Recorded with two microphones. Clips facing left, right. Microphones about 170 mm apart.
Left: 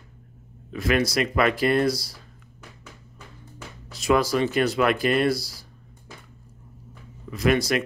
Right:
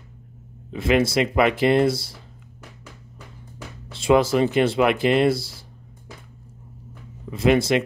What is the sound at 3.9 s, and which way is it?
Speech, 25° right (ahead or behind).